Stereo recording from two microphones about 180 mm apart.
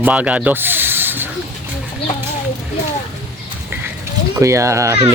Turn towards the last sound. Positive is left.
turn(degrees=-15)  # may be behind; listen again after turning